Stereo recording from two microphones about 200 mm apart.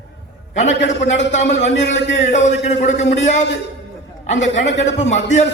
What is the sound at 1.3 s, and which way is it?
A man's voice, 35° left (ahead or behind).